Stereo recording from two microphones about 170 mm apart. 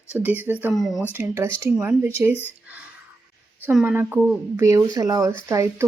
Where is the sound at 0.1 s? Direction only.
10° right (ahead or behind).